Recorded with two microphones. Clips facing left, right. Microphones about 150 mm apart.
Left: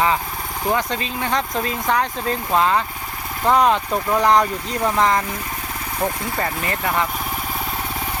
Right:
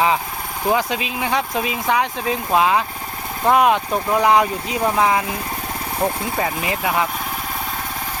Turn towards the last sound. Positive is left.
turn(degrees=-10)  # may be behind; listen again after turning